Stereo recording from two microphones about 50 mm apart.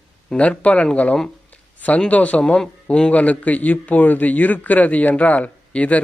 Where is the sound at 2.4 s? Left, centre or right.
Centre.